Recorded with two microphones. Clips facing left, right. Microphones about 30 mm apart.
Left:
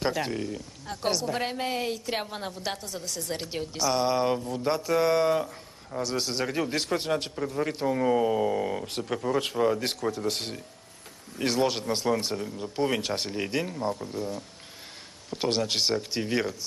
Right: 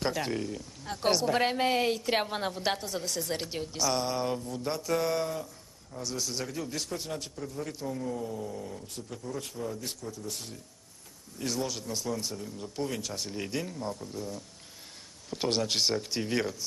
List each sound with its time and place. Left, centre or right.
0.0 s speech: centre
0.8 s a woman's voice: centre
3.5 s speech: centre
4.0 s mantra: left
5.3 s a sound: left
6.4 s a man's voice: left
8.0 s speech: left
11.3 s a man's voice: left
12.4 s mantra: left
12.8 s a man's voice: left
13.3 s mantra: left
15.2 s speech: centre